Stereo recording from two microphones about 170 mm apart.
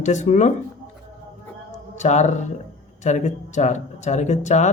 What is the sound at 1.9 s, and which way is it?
Speech, 45° left (ahead or behind).